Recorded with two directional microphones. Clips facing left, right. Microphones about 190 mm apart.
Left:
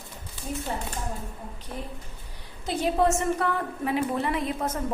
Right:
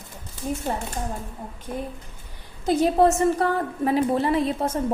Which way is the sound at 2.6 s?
40° right (ahead or behind).